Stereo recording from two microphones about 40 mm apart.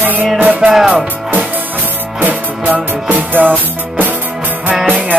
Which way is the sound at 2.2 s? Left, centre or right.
Right.